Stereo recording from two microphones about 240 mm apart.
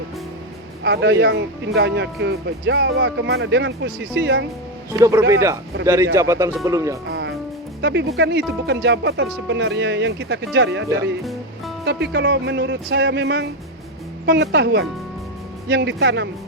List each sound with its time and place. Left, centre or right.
0.9 s speech: right
4.9 s speech: centre
7.1 s music: right
7.8 s speech: right
11.2 s music: centre
11.9 s speech: right